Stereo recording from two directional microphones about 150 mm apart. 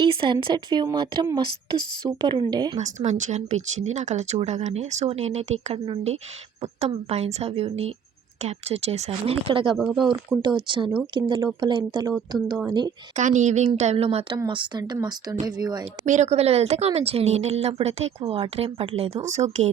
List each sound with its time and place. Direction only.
0.0 s a woman's voice: 35° right (ahead or behind)
2.8 s speech: 50° right (ahead or behind); by 9.7 s 35° right (ahead or behind)
9.7 s speech: centre (ahead or behind)
10.4 s a woman's voice: 30° right (ahead or behind)
13.1 s speech: 55° right (ahead or behind)
14.3 s speech: 30° right (ahead or behind)
16.0 s a woman's voice: 50° right (ahead or behind)